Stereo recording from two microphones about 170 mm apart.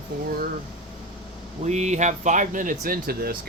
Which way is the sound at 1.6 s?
40° right (ahead or behind).